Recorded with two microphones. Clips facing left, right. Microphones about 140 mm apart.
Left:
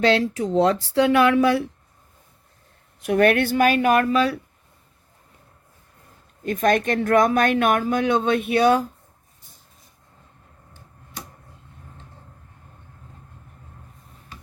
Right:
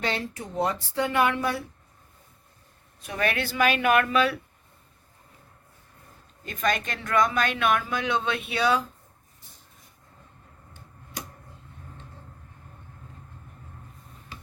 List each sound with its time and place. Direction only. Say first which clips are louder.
0.0 s speech: left 11 dB; 90° left
3.0 s speech: left 10 dB; 60° left (ahead or behind); by 4.4 s 35° left (ahead or behind)
6.4 s speech: left 8 dB; 55° left (ahead or behind)